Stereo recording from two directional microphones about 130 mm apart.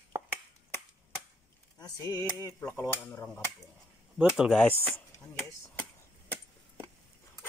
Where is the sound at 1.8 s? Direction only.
30° left (ahead or behind).